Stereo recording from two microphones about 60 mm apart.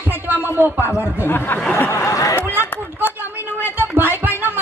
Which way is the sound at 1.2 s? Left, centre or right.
Left.